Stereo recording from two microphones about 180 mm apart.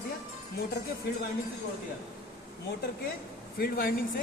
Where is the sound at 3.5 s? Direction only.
55° left (ahead or behind).